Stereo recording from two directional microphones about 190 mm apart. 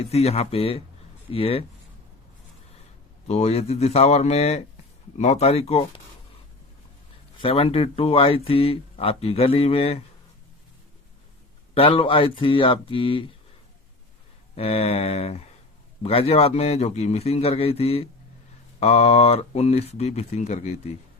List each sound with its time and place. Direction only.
0.0 s speech: 35° left (ahead or behind)
3.2 s speech: 35° left (ahead or behind)
7.3 s speech: 30° left (ahead or behind)
11.7 s speech: 30° left (ahead or behind)
14.5 s speech: 30° left (ahead or behind)